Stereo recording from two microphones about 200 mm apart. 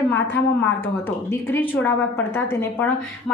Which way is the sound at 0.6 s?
10° left (ahead or behind).